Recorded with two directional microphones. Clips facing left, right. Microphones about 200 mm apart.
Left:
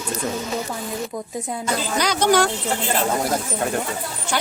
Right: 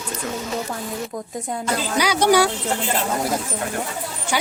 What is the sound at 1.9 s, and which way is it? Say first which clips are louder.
Speech: right 2 dB; 10° right (ahead or behind).